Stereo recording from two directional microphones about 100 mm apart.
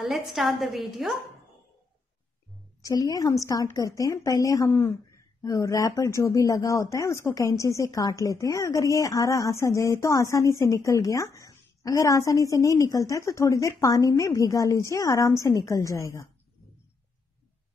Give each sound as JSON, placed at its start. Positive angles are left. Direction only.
{"t": 0.0, "sound": "a woman's voice", "side_deg": 0}
{"t": 2.8, "sound": "speech", "side_deg": 35}